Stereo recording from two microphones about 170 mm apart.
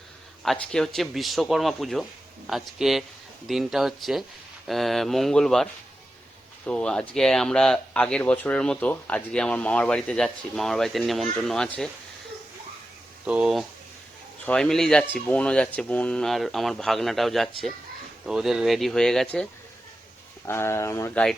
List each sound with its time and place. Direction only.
0.4 s speech: 5° left (ahead or behind)
6.7 s speech: 5° left (ahead or behind)
13.2 s speech: 5° right (ahead or behind)
20.5 s speech: 15° left (ahead or behind)